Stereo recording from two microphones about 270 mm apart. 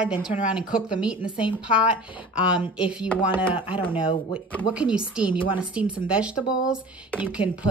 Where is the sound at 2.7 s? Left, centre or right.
Centre.